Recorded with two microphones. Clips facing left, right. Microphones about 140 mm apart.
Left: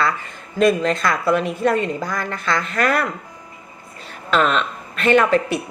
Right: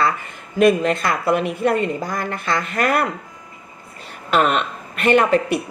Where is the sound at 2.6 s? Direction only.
50° right (ahead or behind).